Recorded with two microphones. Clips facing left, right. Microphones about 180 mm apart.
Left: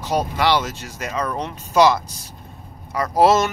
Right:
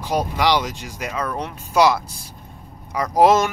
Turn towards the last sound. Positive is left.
turn(degrees=-15)  # may be behind; listen again after turning